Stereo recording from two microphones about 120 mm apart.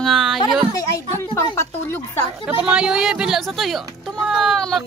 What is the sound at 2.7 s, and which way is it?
Speech, 5° right (ahead or behind).